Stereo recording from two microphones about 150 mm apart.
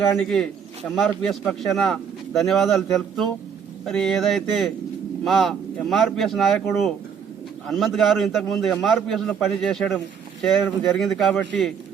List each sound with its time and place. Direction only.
0.1 s speech: 5° left (ahead or behind)
7.7 s speech: centre (ahead or behind)